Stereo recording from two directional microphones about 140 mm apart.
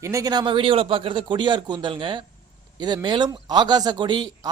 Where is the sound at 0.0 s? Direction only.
25° right (ahead or behind).